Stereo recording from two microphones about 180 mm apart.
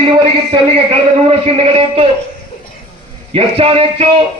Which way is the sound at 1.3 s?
35° right (ahead or behind).